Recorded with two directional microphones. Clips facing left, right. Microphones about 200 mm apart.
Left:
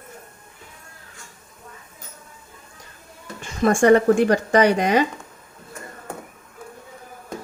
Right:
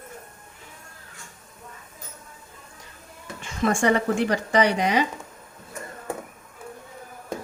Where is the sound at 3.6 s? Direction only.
45° left (ahead or behind).